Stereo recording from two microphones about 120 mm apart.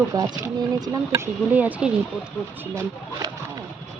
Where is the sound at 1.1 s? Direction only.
15° right (ahead or behind).